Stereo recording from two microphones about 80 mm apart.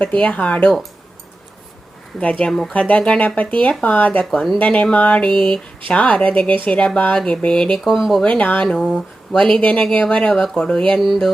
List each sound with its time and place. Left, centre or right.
0.0 s speech: centre
2.4 s speech: centre
2.7 s speech: centre
4.3 s speech: centre
4.5 s speech: centre
7.9 s speech: centre
8.2 s speech: centre
8.8 s speech: centre
11.0 s speech: centre